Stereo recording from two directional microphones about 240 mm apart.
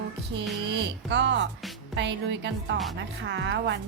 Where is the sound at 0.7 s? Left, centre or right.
Right.